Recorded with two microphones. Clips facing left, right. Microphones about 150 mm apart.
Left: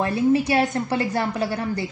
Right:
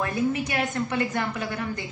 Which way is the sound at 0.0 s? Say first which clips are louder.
Left 6 dB; 30° left (ahead or behind).